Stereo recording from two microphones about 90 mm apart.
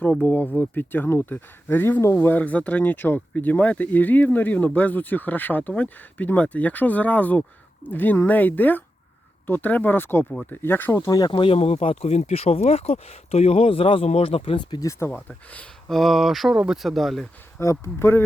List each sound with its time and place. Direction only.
0.0 s speech: 15° left (ahead or behind)
11.3 s speech: 80° left
13.6 s speech: 90° left; by 14.8 s 65° left (ahead or behind)
14.8 s speech: 35° left (ahead or behind)
15.3 s speech: 15° left (ahead or behind)
15.9 s speech: centre (ahead or behind)
17.6 s speech: 35° left (ahead or behind)